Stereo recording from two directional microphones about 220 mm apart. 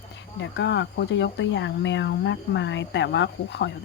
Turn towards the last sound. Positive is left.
turn(degrees=50)  # may be behind; listen again after turning